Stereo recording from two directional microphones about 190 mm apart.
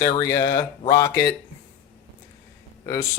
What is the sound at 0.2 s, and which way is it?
Speech, 15° left (ahead or behind).